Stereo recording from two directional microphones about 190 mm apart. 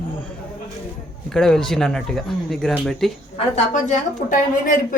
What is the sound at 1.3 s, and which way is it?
Speech, 5° left (ahead or behind).